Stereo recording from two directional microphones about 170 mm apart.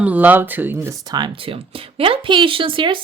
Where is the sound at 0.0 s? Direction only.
10° right (ahead or behind).